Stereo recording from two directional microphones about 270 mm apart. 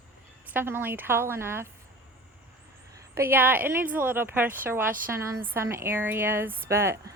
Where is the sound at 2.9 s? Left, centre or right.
Centre.